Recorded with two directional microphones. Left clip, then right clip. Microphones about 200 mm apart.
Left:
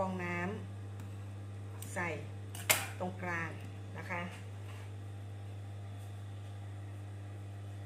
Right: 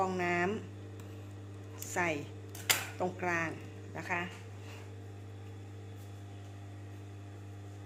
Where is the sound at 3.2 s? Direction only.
50° right (ahead or behind).